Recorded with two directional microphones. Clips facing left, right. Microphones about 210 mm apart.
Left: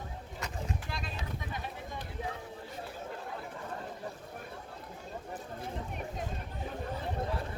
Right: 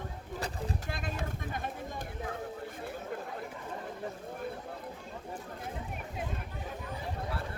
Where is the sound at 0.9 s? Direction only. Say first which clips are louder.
Right 3 dB; 50° right (ahead or behind).